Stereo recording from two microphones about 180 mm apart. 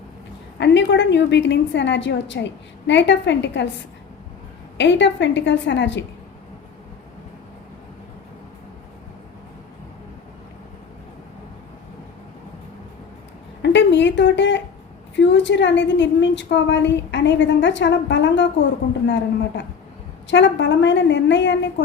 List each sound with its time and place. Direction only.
0.6 s a woman's voice: 75° left (ahead or behind)
4.8 s a woman's voice: 80° left
13.6 s a sound: 80° left
15.1 s a woman's voice: 80° left